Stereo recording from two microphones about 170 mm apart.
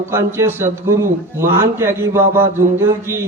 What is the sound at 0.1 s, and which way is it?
Speech, 15° right (ahead or behind).